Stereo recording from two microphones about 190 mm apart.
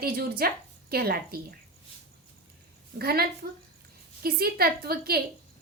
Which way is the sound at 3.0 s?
55° right (ahead or behind).